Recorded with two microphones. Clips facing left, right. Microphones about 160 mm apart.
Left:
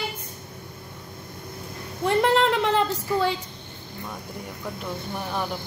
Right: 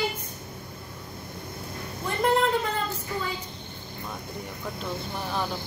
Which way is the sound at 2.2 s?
85° left.